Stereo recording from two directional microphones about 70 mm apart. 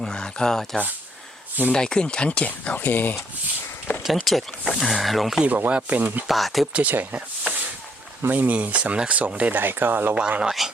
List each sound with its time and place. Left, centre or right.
0.0 s speech: centre
4.0 s speech: centre
5.4 s speech: right
6.2 s speech: centre
6.7 s speech: right
10.2 s speech: centre